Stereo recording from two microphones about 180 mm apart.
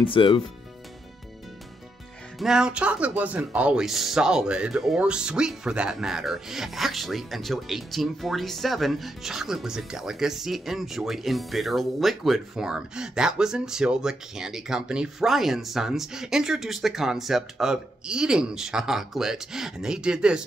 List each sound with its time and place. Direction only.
0.0 s speech: 30° left (ahead or behind)
2.3 s speech: 5° right (ahead or behind)